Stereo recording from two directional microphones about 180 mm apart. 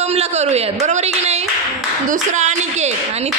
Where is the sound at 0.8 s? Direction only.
40° right (ahead or behind).